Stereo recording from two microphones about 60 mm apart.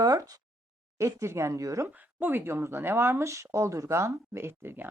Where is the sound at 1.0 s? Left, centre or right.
Right.